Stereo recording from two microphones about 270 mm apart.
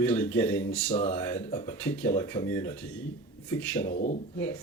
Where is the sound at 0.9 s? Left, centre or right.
Left.